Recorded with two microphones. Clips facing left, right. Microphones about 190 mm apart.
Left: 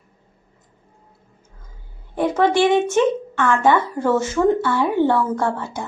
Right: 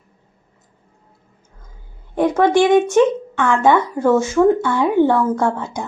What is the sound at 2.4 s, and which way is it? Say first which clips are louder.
A woman's voice: right 3 dB; 15° right (ahead or behind).